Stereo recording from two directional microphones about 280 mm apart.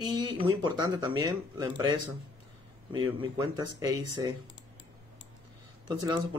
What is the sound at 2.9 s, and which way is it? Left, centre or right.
Speech, centre.